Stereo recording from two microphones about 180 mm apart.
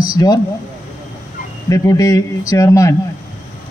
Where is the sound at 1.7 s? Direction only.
20° left (ahead or behind).